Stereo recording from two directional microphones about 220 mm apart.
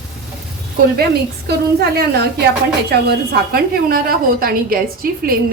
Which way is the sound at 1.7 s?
45° right (ahead or behind).